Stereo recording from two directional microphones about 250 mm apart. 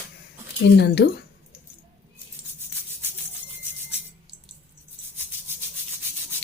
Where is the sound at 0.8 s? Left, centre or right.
Left.